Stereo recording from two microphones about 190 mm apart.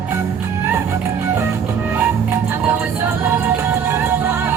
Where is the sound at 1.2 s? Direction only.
10° right (ahead or behind).